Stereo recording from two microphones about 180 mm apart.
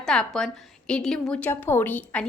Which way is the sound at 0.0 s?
5° left (ahead or behind).